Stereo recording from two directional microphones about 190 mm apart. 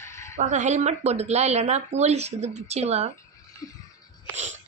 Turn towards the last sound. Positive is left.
turn(degrees=20)  # may be behind; listen again after turning